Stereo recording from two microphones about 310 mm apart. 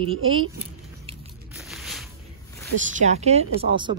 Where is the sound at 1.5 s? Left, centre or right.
Centre.